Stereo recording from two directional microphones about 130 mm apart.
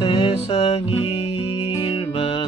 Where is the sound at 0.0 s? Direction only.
40° left (ahead or behind).